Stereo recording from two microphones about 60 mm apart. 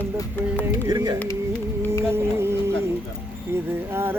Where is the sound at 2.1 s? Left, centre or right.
Right.